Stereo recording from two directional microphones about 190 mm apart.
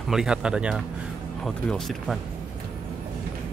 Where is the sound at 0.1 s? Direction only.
5° right (ahead or behind).